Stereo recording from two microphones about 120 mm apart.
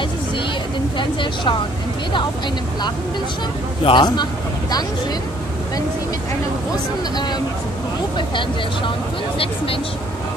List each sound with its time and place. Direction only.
0.9 s speech: 45° left (ahead or behind)
3.8 s speech: 40° left (ahead or behind)
8.2 s speech: 45° left (ahead or behind)